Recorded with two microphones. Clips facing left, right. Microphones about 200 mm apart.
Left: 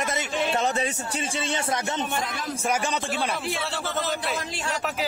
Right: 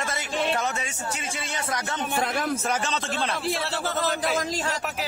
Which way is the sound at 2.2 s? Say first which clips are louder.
Right 5 dB; 60° right (ahead or behind).